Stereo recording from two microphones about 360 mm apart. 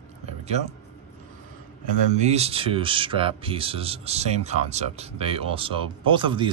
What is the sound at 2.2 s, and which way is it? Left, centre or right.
A man's voice, centre.